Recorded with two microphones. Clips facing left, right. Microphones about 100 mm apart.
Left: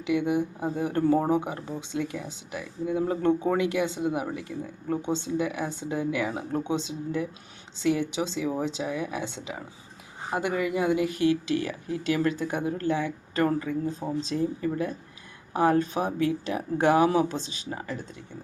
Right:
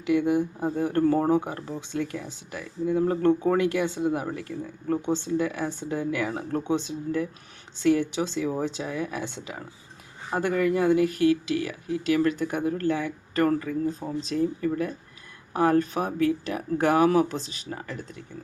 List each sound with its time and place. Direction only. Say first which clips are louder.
0.0 s speech: right 2 dB; 20° left (ahead or behind)